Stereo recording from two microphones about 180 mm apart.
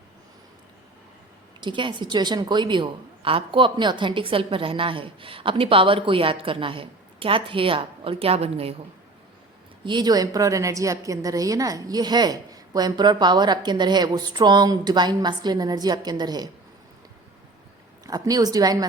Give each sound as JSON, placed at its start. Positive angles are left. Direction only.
{"t": 1.6, "sound": "a woman's voice", "side_deg": -25}
{"t": 9.8, "sound": "a woman's voice", "side_deg": -25}
{"t": 18.0, "sound": "a woman's voice", "side_deg": -20}